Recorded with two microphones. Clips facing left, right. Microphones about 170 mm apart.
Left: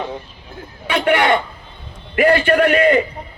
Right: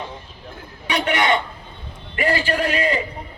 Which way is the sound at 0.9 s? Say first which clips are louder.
Left 4 dB; 55° left (ahead or behind).